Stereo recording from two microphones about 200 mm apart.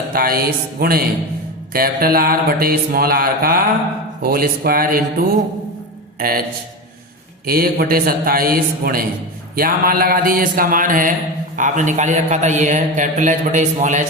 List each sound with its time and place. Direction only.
0.1 s mantra: 45° right (ahead or behind)
6.1 s speech: 45° right (ahead or behind)
7.4 s mantra: 50° right (ahead or behind)
11.5 s a man's voice: 40° right (ahead or behind)